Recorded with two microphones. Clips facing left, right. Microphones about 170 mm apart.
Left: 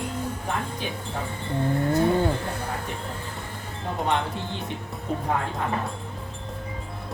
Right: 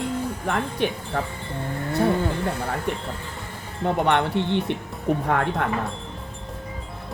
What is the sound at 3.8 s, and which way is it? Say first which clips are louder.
Speech: right 5 dB; 70° right (ahead or behind).